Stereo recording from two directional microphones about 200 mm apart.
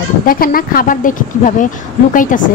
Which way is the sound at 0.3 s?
45° left (ahead or behind).